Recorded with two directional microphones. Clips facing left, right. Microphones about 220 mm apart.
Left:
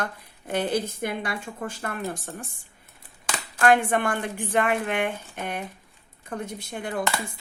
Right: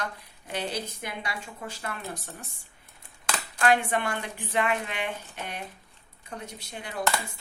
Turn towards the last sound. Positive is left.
turn(degrees=50)  # may be behind; listen again after turning